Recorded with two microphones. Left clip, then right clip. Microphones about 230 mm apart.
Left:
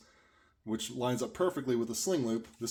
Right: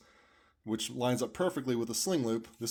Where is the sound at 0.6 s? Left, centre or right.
Right.